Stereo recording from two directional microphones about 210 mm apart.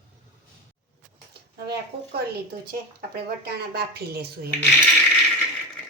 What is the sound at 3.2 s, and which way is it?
Speech, 50° right (ahead or behind).